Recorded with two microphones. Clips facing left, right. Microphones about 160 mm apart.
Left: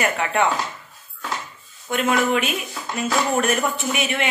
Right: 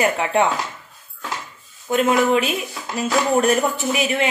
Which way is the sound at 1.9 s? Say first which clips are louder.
Right 3 dB; 30° right (ahead or behind).